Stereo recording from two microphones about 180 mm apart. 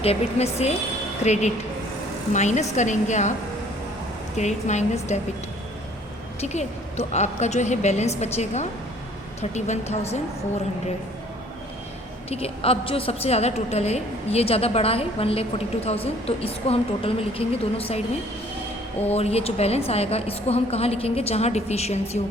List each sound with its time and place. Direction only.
0.0 s a woman's voice: 35° left (ahead or behind)
4.4 s a woman's voice: 40° left (ahead or behind)
6.4 s a woman's voice: 40° left (ahead or behind)
12.3 s a woman's voice: 30° left (ahead or behind)
19.1 s a woman's voice: 35° left (ahead or behind)